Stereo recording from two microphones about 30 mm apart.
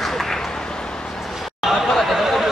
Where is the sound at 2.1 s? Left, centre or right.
Centre.